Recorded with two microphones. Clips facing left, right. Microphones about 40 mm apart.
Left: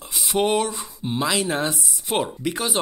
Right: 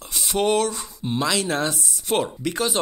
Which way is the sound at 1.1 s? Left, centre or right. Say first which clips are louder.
Even; centre.